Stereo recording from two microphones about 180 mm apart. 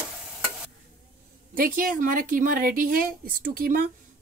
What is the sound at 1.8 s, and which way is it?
Speech, 50° right (ahead or behind).